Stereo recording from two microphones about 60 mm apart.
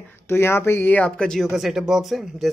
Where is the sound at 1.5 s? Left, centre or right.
Centre.